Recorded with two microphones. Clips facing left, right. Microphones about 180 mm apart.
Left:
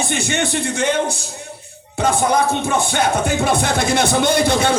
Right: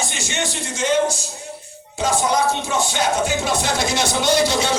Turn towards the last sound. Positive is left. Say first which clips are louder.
# left 2 dB
turn(degrees=55)  # may be behind; listen again after turning